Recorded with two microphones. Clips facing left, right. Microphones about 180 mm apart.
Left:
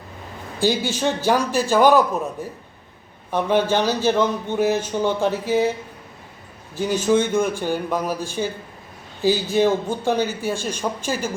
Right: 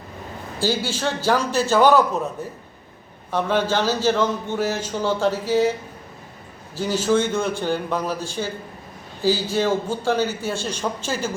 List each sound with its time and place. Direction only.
0.6 s speech: 15° left (ahead or behind)
3.3 s speech: 15° left (ahead or behind)
6.7 s speech: 15° left (ahead or behind)